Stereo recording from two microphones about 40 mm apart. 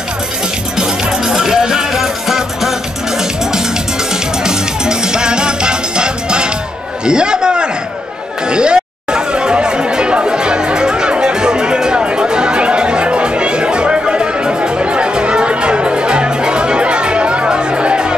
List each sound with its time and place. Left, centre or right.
0.7 s music: centre
4.4 s music: centre
7.1 s a sound: right
8.5 s chatter: right